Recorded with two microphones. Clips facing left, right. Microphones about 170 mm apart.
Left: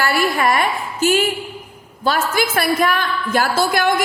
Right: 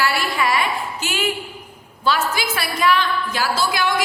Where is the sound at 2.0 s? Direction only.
50° left (ahead or behind).